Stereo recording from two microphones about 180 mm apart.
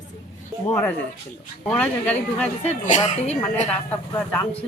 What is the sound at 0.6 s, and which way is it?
Speech, 10° left (ahead or behind).